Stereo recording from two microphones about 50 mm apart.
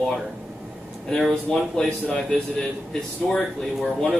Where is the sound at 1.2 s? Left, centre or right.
Centre.